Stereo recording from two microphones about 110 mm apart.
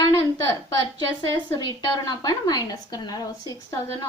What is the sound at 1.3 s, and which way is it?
A woman's voice, 40° left (ahead or behind).